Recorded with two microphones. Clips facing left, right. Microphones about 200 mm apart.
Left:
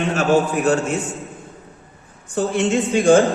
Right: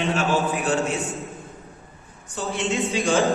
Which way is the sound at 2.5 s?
50° left (ahead or behind).